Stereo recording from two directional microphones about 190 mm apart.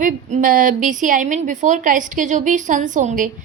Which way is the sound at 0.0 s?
45° right (ahead or behind).